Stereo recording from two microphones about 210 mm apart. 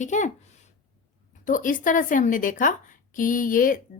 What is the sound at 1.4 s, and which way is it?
A woman's voice, 40° left (ahead or behind).